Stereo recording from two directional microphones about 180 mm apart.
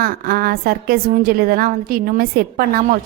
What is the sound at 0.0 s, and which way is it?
A woman's voice, 55° right (ahead or behind).